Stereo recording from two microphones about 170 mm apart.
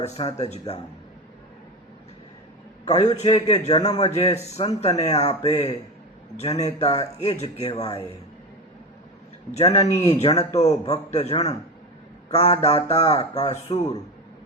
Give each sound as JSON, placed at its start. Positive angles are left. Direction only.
{"t": 0.0, "sound": "speech", "side_deg": 35}
{"t": 3.0, "sound": "speech", "side_deg": 30}
{"t": 9.5, "sound": "speech", "side_deg": 40}